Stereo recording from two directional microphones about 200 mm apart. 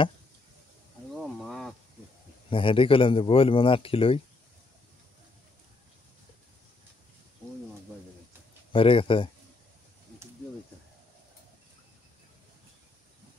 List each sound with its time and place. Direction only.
1.1 s a sound: centre (ahead or behind)
2.5 s a man's voice: 25° left (ahead or behind)
8.7 s a man's voice: 25° left (ahead or behind)